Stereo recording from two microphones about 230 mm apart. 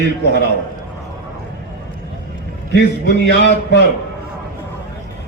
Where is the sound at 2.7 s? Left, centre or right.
Left.